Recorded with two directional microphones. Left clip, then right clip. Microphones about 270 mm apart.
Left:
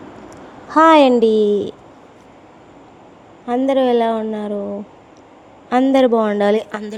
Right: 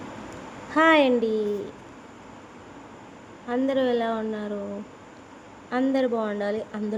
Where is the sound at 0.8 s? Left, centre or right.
Left.